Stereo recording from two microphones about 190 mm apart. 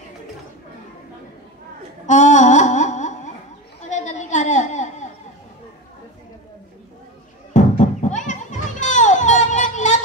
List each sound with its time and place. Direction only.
2.0 s music: 40° left (ahead or behind)
3.9 s a sound: 40° left (ahead or behind)
7.5 s children playing: 40° left (ahead or behind)